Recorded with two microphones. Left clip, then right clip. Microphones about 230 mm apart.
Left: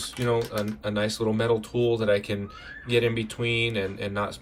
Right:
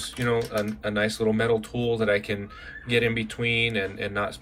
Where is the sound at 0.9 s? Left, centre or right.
Centre.